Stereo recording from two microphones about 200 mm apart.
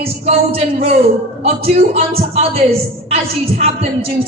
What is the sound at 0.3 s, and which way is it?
Speech, 30° right (ahead or behind).